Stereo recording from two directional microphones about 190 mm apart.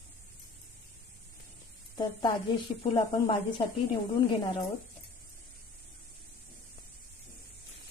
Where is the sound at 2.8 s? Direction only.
30° left (ahead or behind).